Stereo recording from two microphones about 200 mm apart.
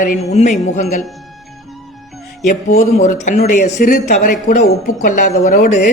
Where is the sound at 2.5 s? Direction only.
40° left (ahead or behind).